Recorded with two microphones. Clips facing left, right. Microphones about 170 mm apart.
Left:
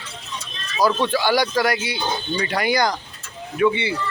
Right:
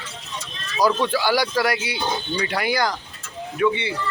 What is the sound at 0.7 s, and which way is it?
A man's voice, 15° right (ahead or behind).